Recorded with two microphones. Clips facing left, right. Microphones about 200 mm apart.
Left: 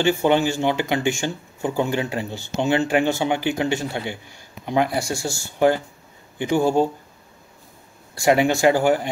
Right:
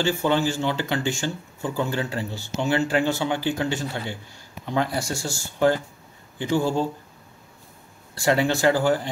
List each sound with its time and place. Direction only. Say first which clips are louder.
0.0 s a man's voice: left 4 dB; 20° left (ahead or behind)
8.1 s speech: left 4 dB; 15° left (ahead or behind)